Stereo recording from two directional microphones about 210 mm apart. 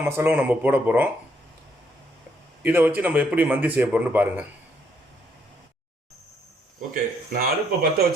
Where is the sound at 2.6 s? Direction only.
10° right (ahead or behind).